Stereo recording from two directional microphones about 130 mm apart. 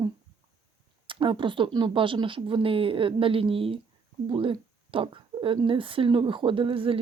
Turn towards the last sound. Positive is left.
turn(degrees=-45)  # may be behind; listen again after turning